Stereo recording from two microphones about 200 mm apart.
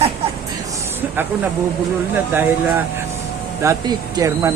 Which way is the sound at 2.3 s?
10° right (ahead or behind).